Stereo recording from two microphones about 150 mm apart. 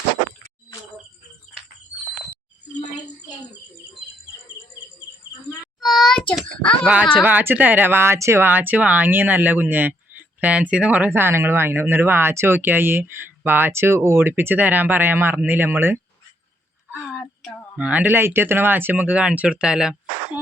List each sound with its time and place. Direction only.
5.8 s child singing: centre (ahead or behind)
6.8 s speech: 5° right (ahead or behind)
16.9 s a sound: 5° right (ahead or behind)
17.7 s speech: 10° right (ahead or behind)